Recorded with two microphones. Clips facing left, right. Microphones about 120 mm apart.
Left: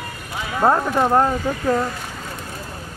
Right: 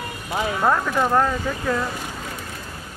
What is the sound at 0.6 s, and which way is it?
Speech, 30° left (ahead or behind).